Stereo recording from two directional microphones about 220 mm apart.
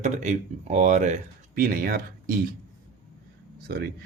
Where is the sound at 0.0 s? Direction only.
35° right (ahead or behind).